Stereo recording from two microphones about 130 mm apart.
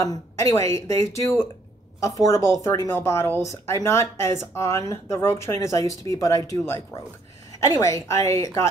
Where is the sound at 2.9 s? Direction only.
20° left (ahead or behind).